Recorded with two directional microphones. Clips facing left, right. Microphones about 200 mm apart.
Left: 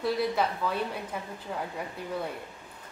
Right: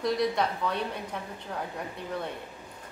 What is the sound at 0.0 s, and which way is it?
A woman's voice, 5° left (ahead or behind).